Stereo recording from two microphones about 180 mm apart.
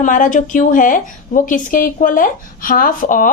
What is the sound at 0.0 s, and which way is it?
A woman's voice, 45° left (ahead or behind).